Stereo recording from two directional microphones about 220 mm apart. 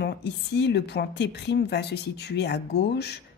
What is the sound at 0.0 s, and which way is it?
A woman's voice, 50° left (ahead or behind).